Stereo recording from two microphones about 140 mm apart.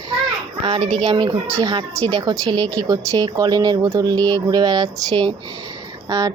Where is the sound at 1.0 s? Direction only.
30° right (ahead or behind).